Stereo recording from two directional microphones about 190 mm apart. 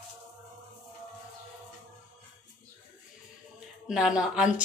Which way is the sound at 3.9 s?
5° right (ahead or behind).